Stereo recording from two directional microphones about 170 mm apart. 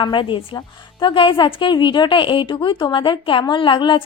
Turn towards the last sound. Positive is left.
turn(degrees=30)  # may be behind; listen again after turning